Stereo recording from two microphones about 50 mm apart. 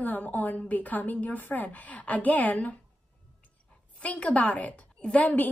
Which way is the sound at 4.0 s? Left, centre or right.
Left.